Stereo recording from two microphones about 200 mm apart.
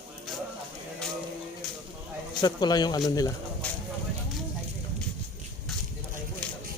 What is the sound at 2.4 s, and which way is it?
Speech, 20° left (ahead or behind).